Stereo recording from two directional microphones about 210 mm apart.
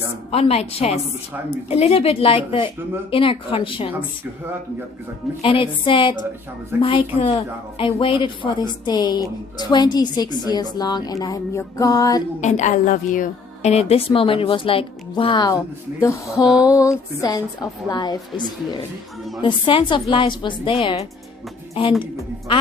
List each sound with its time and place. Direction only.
0.3 s a woman's voice: 30° left (ahead or behind)
5.4 s a woman's voice: 25° left (ahead or behind)
6.7 s a woman's voice: 10° right (ahead or behind)
7.2 s a woman's voice: 25° left (ahead or behind)
12.4 s a woman's voice: 35° left (ahead or behind); by 16.5 s 15° left (ahead or behind)
16.5 s a sound: 5° right (ahead or behind)
16.7 s a woman's voice: 15° left (ahead or behind)